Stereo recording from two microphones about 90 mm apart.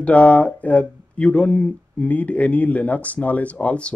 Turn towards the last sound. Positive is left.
turn(degrees=15)  # may be behind; listen again after turning